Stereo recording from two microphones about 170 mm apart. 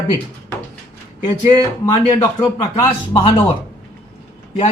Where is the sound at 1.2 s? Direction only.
30° left (ahead or behind).